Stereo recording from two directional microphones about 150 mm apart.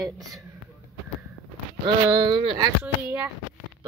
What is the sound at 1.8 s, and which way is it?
Speech, 30° right (ahead or behind).